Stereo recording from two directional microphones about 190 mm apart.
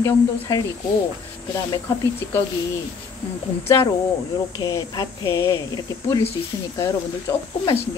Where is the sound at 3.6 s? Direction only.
15° left (ahead or behind).